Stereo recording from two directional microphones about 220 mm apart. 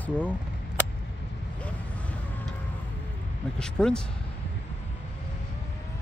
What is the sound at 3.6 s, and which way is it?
Speech, 5° left (ahead or behind).